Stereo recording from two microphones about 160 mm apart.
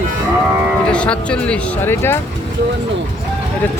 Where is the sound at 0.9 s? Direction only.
5° left (ahead or behind).